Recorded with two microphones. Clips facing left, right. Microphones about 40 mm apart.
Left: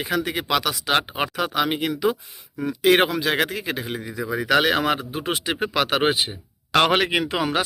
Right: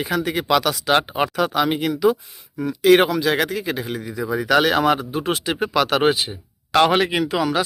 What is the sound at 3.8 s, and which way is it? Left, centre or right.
Speech, centre.